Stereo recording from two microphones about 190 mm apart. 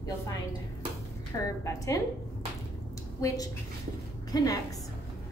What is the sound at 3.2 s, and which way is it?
Speech, 15° left (ahead or behind).